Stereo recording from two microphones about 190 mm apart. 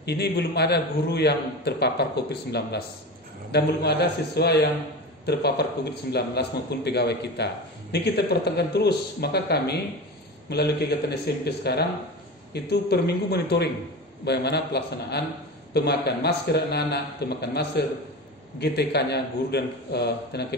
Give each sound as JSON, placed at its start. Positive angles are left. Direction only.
{"t": 0.0, "sound": "a man's voice", "side_deg": 60}